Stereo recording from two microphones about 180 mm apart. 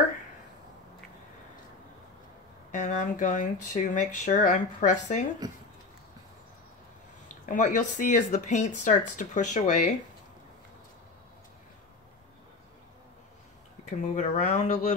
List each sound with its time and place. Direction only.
2.7 s speech: 40° left (ahead or behind)
5.4 s speech: 20° right (ahead or behind)
7.4 s speech: 45° left (ahead or behind)
13.8 s speech: 40° left (ahead or behind)